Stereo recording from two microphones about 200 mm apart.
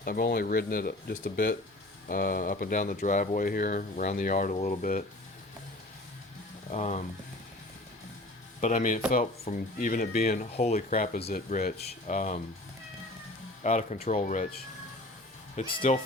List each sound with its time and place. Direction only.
0.0 s speech: 50° left (ahead or behind)
6.7 s speech: 35° left (ahead or behind)
8.6 s speech: 40° left (ahead or behind)
10.4 s speech: 35° left (ahead or behind)
13.6 s speech: 35° left (ahead or behind)